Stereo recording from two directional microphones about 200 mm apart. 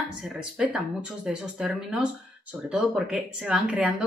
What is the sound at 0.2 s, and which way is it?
Speech, 5° right (ahead or behind).